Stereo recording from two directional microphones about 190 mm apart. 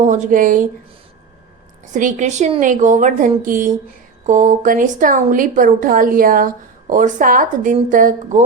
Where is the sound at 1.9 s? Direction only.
40° right (ahead or behind).